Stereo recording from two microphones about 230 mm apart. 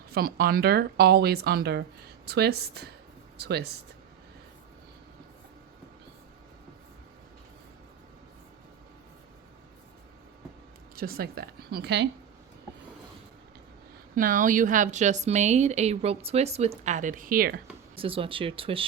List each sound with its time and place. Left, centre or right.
0.1 s speech: right
10.9 s a woman's voice: right
14.2 s a woman's voice: right
17.9 s speech: right